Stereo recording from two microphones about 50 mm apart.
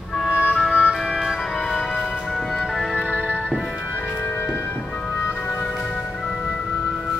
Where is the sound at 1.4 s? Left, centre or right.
Centre.